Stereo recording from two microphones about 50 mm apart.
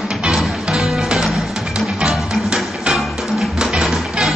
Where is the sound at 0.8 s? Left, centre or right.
Centre.